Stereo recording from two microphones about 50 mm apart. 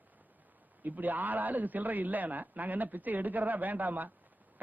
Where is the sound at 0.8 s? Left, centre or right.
Right.